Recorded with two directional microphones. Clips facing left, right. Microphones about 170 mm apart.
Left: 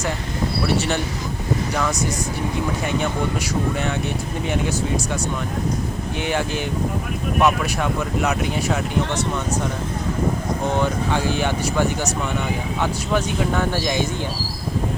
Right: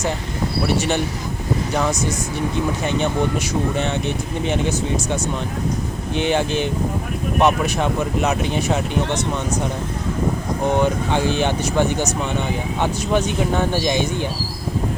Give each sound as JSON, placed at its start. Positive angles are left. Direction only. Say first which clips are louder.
{"t": 1.7, "sound": "speech", "louder": "right 5 dB", "side_deg": -25}
{"t": 3.0, "sound": "speech", "louder": "right 3 dB", "side_deg": -25}
{"t": 6.1, "sound": "speech", "louder": "right 5 dB", "side_deg": -25}
{"t": 10.8, "sound": "speech", "louder": "right 3 dB", "side_deg": -20}